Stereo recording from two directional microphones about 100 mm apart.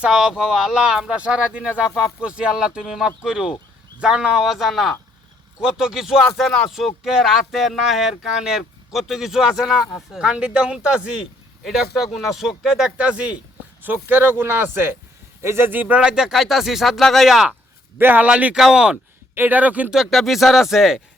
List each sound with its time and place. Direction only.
0.0 s speech: 5° right (ahead or behind)
17.9 s speech: 20° right (ahead or behind)
19.3 s speech: 20° right (ahead or behind)
20.0 s speech: centre (ahead or behind)